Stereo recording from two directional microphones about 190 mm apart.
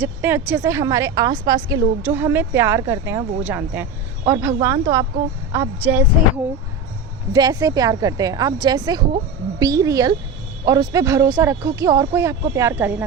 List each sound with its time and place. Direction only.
0.0 s a woman's voice: 10° right (ahead or behind)